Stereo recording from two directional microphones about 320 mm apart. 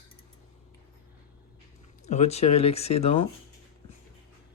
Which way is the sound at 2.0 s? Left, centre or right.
Left.